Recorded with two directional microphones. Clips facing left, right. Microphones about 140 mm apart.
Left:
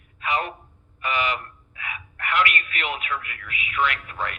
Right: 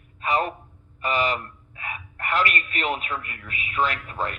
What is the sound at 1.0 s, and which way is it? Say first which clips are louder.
Speech: right 2 dB; 40° right (ahead or behind).